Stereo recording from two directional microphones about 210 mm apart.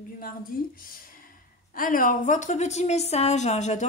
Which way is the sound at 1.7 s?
40° left (ahead or behind).